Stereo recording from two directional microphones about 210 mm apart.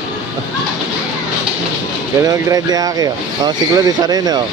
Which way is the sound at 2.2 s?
15° right (ahead or behind).